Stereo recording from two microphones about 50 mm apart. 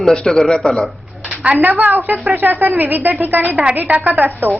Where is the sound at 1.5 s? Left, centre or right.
Right.